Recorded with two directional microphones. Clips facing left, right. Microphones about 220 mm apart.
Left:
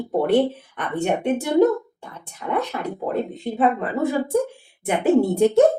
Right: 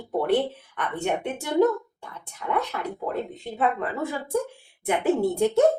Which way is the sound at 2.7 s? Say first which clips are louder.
Left 4 dB; 25° left (ahead or behind).